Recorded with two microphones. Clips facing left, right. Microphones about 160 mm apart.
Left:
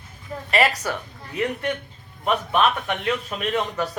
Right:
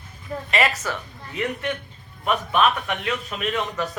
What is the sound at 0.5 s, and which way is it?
Speech, 35° left (ahead or behind).